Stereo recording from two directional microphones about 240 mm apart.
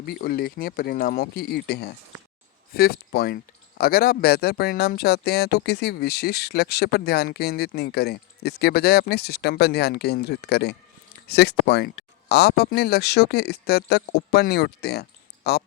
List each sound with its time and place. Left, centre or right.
0.0 s speech: left